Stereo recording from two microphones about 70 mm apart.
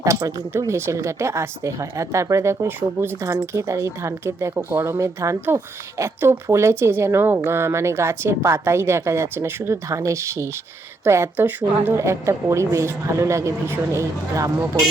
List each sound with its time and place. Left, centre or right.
0.0 s a woman's voice: right
2.6 s speech: right
3.2 s a woman's voice: right